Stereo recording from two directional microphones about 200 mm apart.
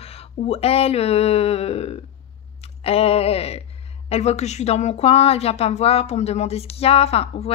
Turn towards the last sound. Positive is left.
turn(degrees=30)  # may be behind; listen again after turning